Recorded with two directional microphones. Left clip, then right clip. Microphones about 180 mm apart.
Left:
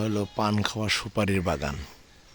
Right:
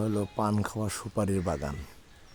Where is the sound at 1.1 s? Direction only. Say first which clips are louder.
Left 4 dB; centre (ahead or behind).